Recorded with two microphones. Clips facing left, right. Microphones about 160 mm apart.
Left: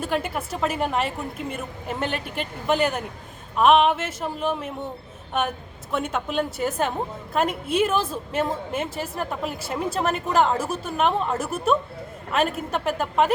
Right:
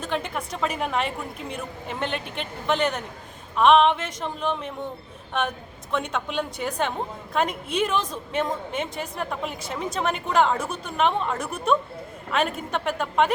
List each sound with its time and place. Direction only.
0.0 s a woman's voice: 5° left (ahead or behind)
5.9 s a woman's voice: 5° left (ahead or behind)